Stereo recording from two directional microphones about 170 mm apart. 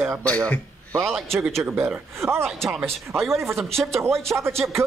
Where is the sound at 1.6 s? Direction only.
15° right (ahead or behind).